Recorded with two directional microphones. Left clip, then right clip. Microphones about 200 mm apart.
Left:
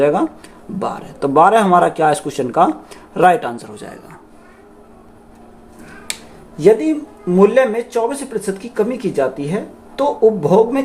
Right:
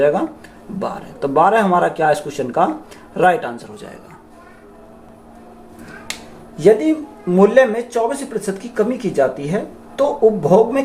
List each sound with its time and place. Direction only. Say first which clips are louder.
0.0 s speech: left 1 dB; 30° left (ahead or behind)
6.6 s speech: even; 15° left (ahead or behind)